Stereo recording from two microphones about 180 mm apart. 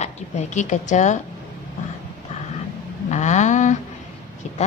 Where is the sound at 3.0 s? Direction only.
40° left (ahead or behind).